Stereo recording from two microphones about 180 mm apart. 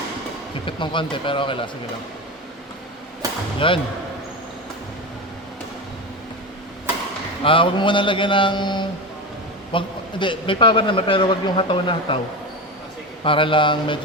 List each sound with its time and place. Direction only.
0.6 s a man's voice: 25° left (ahead or behind)
3.6 s a man's voice: 30° left (ahead or behind)
7.4 s a man's voice: 30° left (ahead or behind)
13.2 s a man's voice: 30° left (ahead or behind)